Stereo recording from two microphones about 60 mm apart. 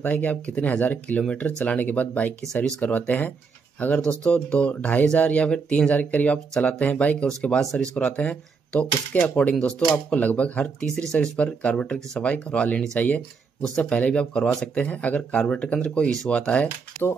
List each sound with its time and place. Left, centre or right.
0.0 s speech: left
2.5 s speech: centre
2.8 s speech: left; by 14.7 s centre
14.8 s speech: left